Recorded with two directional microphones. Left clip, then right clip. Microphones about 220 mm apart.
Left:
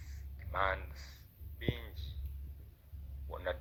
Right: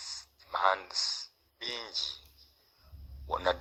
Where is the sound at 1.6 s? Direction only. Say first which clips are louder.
Right 4 dB; 55° right (ahead or behind).